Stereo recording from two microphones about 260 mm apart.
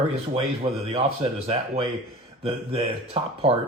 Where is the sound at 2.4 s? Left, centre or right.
Right.